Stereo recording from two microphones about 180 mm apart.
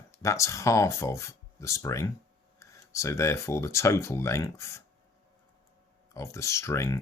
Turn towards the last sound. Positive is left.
turn(degrees=15)  # may be behind; listen again after turning